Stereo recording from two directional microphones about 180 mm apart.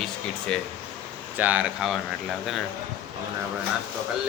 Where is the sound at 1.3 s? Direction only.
10° right (ahead or behind).